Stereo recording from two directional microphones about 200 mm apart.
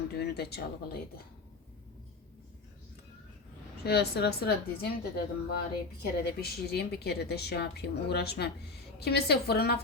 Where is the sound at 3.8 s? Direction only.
55° left (ahead or behind).